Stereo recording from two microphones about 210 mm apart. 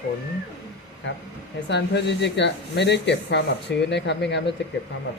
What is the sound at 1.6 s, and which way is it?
Speech, 55° left (ahead or behind).